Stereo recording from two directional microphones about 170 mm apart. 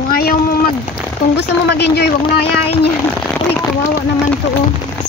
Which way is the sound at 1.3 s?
75° left (ahead or behind).